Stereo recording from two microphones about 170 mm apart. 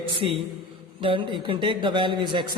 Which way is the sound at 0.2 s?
35° right (ahead or behind).